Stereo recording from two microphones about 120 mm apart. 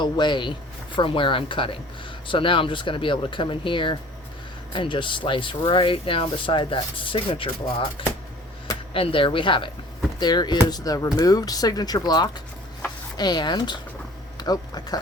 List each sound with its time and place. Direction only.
0.0 s speech: 40° left (ahead or behind)